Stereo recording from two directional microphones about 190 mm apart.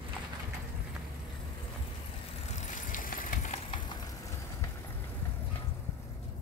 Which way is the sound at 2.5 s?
40° left (ahead or behind).